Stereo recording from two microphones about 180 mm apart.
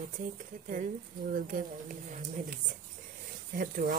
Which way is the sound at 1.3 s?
50° right (ahead or behind).